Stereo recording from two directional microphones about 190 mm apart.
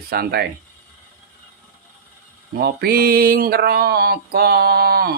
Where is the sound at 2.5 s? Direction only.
55° right (ahead or behind).